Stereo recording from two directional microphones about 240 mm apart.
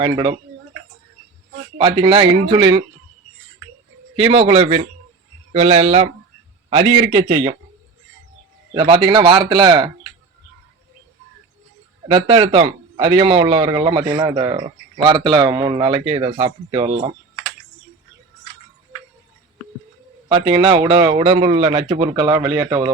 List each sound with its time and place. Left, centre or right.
0.0 s a man's voice: centre
1.8 s a man's voice: right
4.2 s a man's voice: right
8.7 s a man's voice: right
12.0 s a man's voice: right
20.2 s a man's voice: centre